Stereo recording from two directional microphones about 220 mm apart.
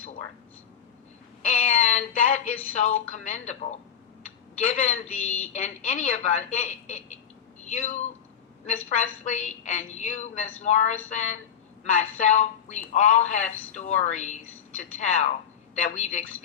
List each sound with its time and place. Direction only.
1.9 s a man's voice: 30° left (ahead or behind)